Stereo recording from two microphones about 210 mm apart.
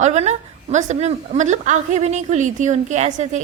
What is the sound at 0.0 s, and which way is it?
A woman's voice, 30° right (ahead or behind).